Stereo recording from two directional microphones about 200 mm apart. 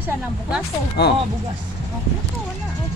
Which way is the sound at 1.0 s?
55° left (ahead or behind).